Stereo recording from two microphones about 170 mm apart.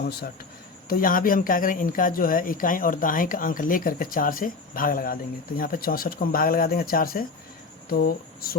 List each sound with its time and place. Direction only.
0.0 s speech: 70° left (ahead or behind)
0.9 s speech: 55° left (ahead or behind)